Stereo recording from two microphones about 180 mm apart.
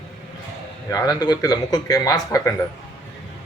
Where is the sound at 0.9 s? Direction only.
20° left (ahead or behind).